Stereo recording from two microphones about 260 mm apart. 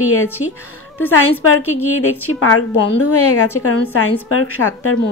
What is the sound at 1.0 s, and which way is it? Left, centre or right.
A woman's voice, left.